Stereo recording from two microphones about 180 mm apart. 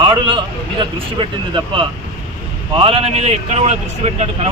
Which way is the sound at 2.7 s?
30° right (ahead or behind).